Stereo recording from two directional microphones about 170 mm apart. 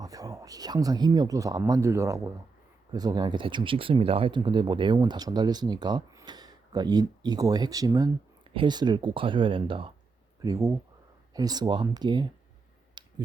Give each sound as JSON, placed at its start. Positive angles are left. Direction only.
{"t": 0.0, "sound": "speech", "side_deg": -20}
{"t": 10.4, "sound": "speech", "side_deg": -20}
{"t": 12.9, "sound": "a sound", "side_deg": -30}